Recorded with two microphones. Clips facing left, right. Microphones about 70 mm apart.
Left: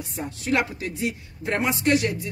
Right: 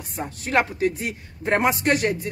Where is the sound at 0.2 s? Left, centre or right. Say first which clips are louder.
Right 2 dB; right.